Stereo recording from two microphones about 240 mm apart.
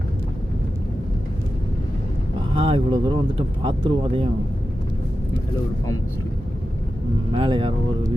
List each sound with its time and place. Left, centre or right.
2.6 s speech: right
7.3 s speech: right